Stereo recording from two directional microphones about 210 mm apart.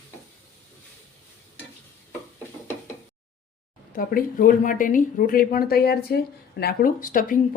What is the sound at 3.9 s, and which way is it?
Speech, 40° left (ahead or behind).